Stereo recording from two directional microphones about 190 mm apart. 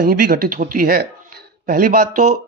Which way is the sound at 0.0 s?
50° right (ahead or behind).